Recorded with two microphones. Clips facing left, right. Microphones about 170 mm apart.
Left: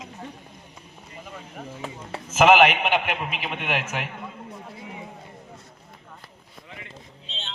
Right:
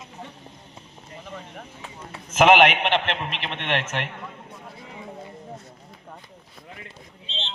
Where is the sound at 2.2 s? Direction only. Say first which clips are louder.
Even; 5° left (ahead or behind).